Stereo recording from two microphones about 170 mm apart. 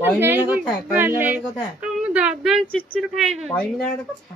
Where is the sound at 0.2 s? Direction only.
10° right (ahead or behind); by 4.1 s 5° left (ahead or behind).